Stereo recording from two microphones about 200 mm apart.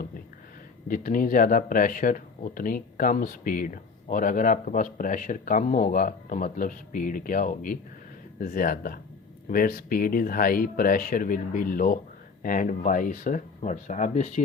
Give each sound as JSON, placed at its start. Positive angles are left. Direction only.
{"t": 0.9, "sound": "speech", "side_deg": 40}